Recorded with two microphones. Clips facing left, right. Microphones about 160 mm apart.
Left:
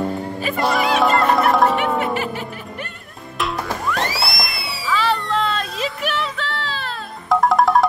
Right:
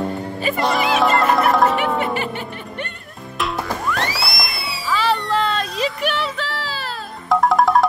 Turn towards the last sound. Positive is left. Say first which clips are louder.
# even
turn(degrees=0)  # may be behind; listen again after turning